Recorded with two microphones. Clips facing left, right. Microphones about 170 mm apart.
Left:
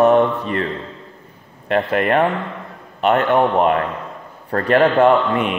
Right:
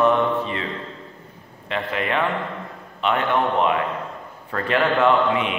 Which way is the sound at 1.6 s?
50° left (ahead or behind).